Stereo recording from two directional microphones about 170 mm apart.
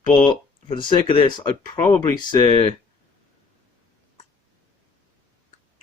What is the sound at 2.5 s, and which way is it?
Speech, 35° left (ahead or behind).